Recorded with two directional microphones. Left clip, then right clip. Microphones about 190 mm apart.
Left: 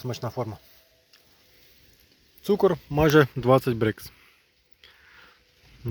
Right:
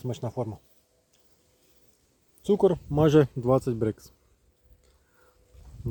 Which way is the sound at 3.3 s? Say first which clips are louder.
Left 4 dB; centre (ahead or behind).